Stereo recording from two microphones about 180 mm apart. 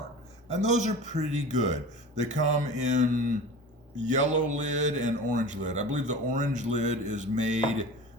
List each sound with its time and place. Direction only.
0.5 s a man's voice: 40° right (ahead or behind)